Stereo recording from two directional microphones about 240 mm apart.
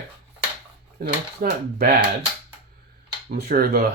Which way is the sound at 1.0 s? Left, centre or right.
Right.